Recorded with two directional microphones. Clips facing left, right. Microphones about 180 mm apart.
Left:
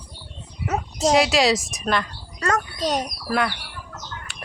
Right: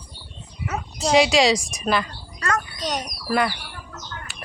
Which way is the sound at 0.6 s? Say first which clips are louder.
Left 4 dB; 40° left (ahead or behind).